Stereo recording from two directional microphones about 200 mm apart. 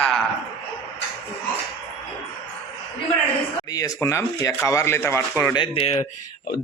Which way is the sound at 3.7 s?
15° left (ahead or behind).